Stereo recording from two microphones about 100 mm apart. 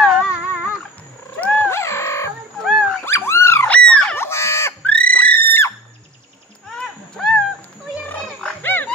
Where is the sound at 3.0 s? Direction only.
25° left (ahead or behind).